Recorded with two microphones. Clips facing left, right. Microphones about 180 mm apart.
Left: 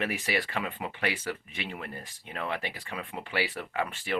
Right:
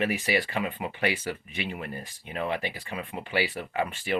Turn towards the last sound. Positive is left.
turn(degrees=-5)  # may be behind; listen again after turning